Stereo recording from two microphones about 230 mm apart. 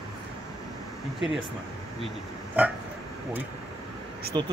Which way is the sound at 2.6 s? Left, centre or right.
Centre.